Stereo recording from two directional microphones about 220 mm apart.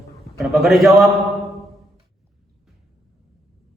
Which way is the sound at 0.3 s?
Centre (ahead or behind).